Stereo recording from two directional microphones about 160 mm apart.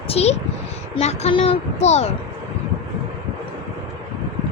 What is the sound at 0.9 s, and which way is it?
Speech, 40° left (ahead or behind).